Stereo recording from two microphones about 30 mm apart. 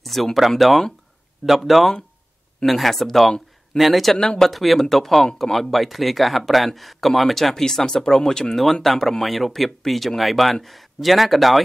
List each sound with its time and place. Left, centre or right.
0.0 s a sound: centre
0.5 s speech: centre
3.7 s speech: centre
7.5 s speech: centre
8.8 s speech: centre